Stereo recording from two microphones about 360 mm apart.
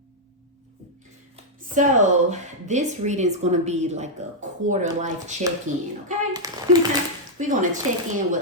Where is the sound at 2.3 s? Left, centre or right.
Centre.